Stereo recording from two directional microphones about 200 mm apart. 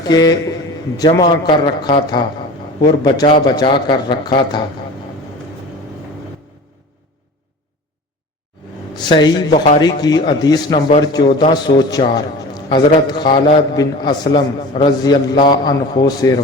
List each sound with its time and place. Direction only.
0.1 s a man's voice: 20° left (ahead or behind)
9.0 s a man's voice: 20° left (ahead or behind)